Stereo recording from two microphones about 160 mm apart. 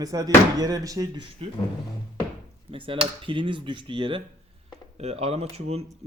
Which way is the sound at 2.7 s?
35° right (ahead or behind).